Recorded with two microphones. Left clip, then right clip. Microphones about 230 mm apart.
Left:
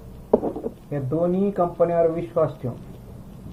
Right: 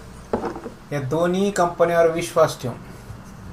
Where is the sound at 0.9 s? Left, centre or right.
Right.